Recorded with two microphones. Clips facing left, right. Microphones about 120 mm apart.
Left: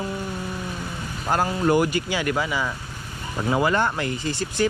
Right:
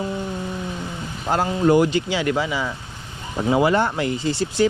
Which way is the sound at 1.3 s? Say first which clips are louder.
Right 3 dB; 20° right (ahead or behind).